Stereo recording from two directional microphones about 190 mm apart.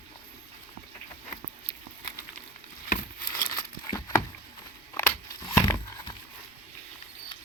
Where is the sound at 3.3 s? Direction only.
20° left (ahead or behind).